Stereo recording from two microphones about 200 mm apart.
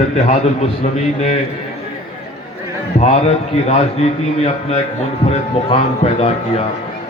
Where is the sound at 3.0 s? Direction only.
35° left (ahead or behind).